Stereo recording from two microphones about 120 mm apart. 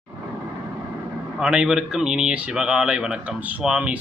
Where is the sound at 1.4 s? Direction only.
5° right (ahead or behind).